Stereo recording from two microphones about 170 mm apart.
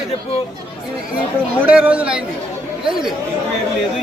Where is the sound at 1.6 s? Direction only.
10° right (ahead or behind).